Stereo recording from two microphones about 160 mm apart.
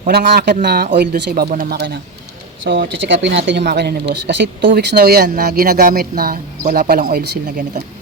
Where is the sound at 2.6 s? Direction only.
90° right; by 7.2 s 70° right (ahead or behind).